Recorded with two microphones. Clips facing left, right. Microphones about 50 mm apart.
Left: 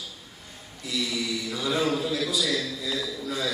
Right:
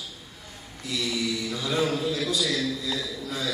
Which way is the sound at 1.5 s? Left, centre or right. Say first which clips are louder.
Left 2 dB; centre.